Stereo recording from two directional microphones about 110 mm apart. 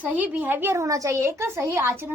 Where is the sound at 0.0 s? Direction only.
15° right (ahead or behind).